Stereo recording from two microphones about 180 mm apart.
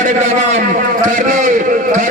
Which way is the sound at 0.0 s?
40° right (ahead or behind).